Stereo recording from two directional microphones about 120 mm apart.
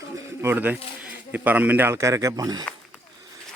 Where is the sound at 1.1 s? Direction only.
15° right (ahead or behind); by 2.6 s 30° right (ahead or behind).